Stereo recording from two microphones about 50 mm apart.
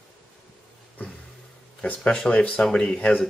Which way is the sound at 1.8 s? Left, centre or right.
Left.